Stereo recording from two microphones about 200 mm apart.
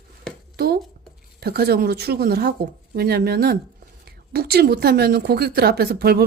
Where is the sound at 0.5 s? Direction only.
50° right (ahead or behind).